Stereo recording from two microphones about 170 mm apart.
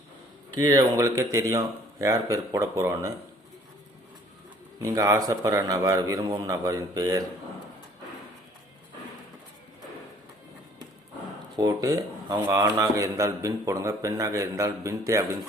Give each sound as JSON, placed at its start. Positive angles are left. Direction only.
{"t": 0.6, "sound": "a man's voice", "side_deg": -20}
{"t": 4.8, "sound": "a man's voice", "side_deg": -20}
{"t": 11.5, "sound": "a man's voice", "side_deg": -20}